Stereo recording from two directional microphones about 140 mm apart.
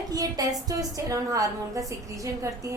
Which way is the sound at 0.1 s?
25° right (ahead or behind).